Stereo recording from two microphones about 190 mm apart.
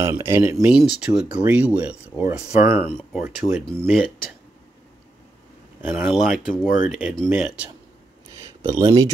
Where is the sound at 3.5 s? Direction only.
5° left (ahead or behind).